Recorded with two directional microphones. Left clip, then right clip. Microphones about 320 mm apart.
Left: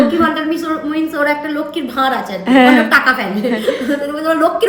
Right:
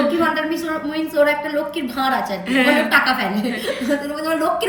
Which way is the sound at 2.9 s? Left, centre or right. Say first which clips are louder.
Left 4 dB; centre.